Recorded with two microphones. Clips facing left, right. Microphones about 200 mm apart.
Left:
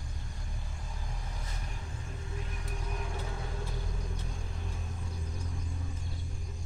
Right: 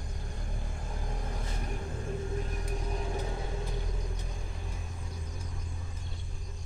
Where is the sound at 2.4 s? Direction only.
30° right (ahead or behind).